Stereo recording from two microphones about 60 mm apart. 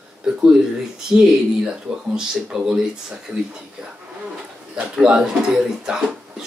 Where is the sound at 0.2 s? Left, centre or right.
Centre.